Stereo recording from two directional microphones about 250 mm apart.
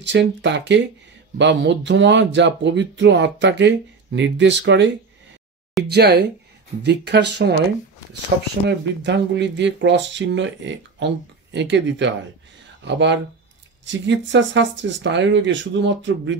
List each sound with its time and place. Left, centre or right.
0.0 s speech: right
8.6 s speech: right